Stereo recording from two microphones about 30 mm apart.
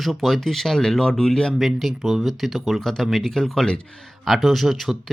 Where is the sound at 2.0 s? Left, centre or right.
Centre.